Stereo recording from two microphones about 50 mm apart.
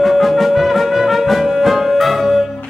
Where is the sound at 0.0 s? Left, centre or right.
Centre.